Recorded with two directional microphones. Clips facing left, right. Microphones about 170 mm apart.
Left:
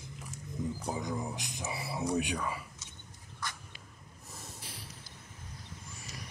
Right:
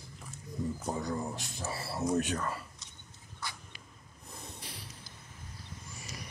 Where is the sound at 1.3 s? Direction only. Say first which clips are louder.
Even; 15° left (ahead or behind).